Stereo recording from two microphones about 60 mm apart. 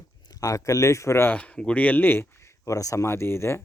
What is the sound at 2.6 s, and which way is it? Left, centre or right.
Speech, left.